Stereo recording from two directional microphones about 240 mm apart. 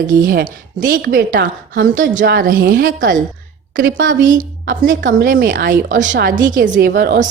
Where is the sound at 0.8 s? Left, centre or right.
Right.